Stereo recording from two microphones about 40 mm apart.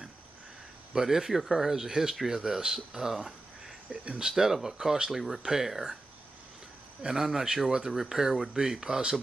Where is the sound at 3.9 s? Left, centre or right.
Right.